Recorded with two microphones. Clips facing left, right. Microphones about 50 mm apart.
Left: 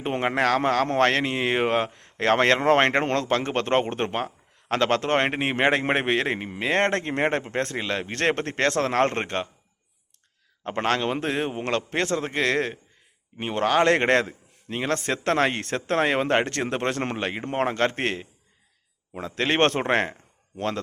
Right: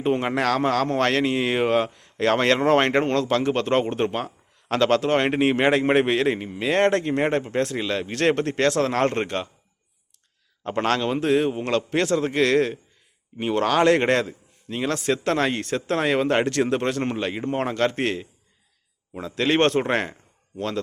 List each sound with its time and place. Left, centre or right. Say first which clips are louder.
0.0 s a man's voice: right 1 dB; left
5.3 s a man's voice: right 3 dB; centre; by 7.8 s left
7.8 s speech: right 2 dB; left
10.6 s speech: right 2 dB; left
11.5 s a man's voice: right 2 dB; left
11.8 s a man's voice: right 4 dB; left
16.0 s a man's voice: right 5 dB; left
19.9 s speech: left 1 dB; left